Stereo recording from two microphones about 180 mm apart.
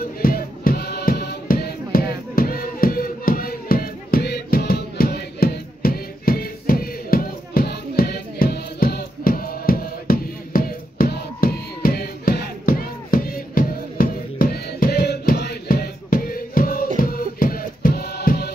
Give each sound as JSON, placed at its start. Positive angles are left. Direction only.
{"t": 0.0, "sound": "music", "side_deg": 50}